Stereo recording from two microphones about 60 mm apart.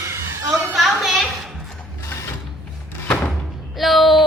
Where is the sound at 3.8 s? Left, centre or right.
Centre.